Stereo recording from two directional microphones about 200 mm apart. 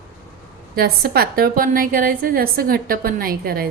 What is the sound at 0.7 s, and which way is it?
A woman's voice, 50° right (ahead or behind).